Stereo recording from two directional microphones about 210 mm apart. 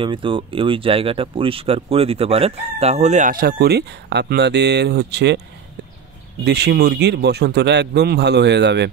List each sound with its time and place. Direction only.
0.0 s speech: 25° right (ahead or behind); by 5.4 s 55° right (ahead or behind)
6.4 s speech: 50° right (ahead or behind)